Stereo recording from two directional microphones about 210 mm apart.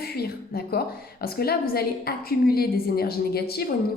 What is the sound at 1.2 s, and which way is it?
A woman's voice, 45° left (ahead or behind).